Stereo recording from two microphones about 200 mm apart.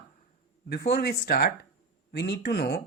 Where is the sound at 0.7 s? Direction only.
55° left (ahead or behind).